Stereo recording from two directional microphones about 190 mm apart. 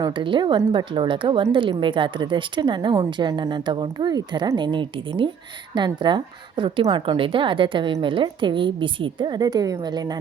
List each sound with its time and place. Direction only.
0.0 s a woman's voice: 25° right (ahead or behind)